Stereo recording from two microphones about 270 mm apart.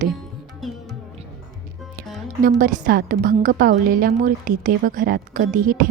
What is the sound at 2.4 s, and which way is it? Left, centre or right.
A woman's voice, right.